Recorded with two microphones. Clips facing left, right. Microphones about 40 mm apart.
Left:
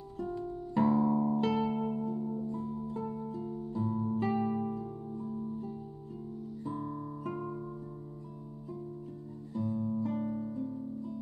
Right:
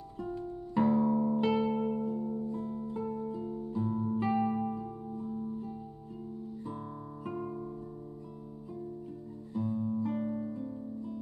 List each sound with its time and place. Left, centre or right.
0.2 s music: centre
6.6 s guitar: centre
9.5 s music: centre